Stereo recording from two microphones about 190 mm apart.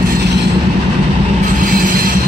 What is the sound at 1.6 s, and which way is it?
Train, 45° right (ahead or behind).